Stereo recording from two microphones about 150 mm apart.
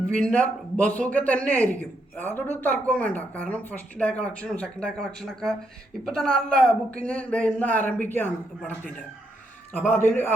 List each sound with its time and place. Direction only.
0.0 s a man's voice: 5° left (ahead or behind)